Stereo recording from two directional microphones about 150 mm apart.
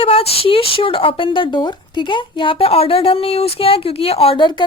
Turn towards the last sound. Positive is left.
turn(degrees=30)  # may be behind; listen again after turning